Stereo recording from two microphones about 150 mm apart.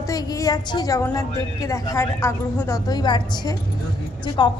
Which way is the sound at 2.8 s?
25° left (ahead or behind).